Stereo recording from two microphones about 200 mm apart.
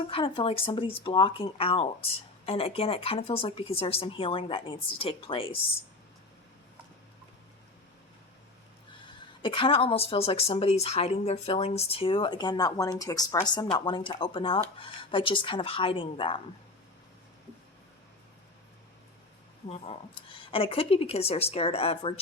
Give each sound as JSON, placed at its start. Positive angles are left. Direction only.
{"t": 0.1, "sound": "a woman's voice", "side_deg": 25}
{"t": 9.0, "sound": "a woman's voice", "side_deg": 25}
{"t": 19.6, "sound": "a woman's voice", "side_deg": 30}